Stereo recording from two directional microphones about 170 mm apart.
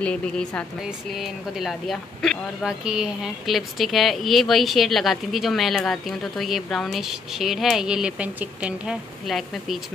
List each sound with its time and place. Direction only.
0.0 s speech: 5° left (ahead or behind)